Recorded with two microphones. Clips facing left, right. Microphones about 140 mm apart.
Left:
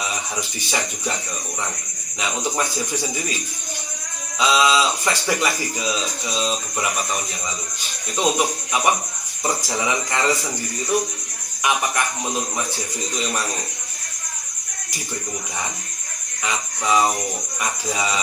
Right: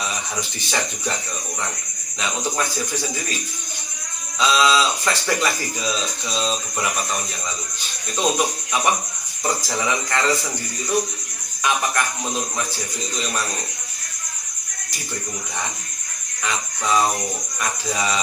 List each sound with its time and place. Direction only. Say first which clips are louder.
2.2 s speech: left 1 dB; 15° left (ahead or behind)
4.4 s speech: even; 15° left (ahead or behind)
16.5 s speech: left 1 dB; 10° left (ahead or behind)